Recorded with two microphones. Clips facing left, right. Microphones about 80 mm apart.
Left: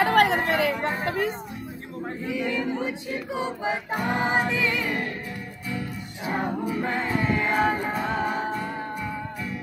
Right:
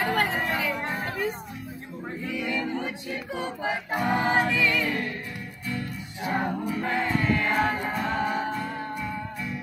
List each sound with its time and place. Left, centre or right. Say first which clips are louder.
0.0 s chatter: left 6 dB; left
2.2 s choir: left 2 dB; centre
3.9 s music: right 2 dB; centre
4.5 s music: right 1 dB; left; by 9.6 s centre